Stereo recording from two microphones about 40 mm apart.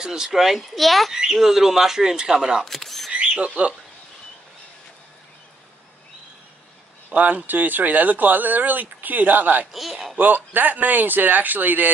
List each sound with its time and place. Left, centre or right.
0.0 s speech: centre
0.4 s a child's voice: centre
1.1 s speech: centre
2.6 s camera: centre
3.1 s rodents: right
7.1 s speech: right
7.4 s speech: right
9.7 s a child's voice: centre
10.1 s speech: right